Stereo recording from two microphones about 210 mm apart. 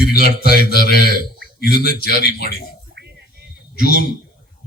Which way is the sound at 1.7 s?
40° right (ahead or behind).